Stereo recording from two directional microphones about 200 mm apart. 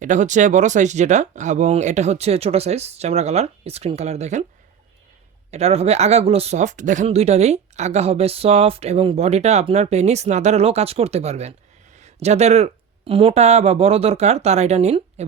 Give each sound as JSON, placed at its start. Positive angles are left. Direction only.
{"t": 0.0, "sound": "speech", "side_deg": -40}
{"t": 5.5, "sound": "speech", "side_deg": -30}